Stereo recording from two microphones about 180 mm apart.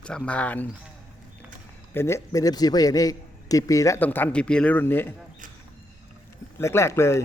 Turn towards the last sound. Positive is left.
turn(degrees=15)  # may be behind; listen again after turning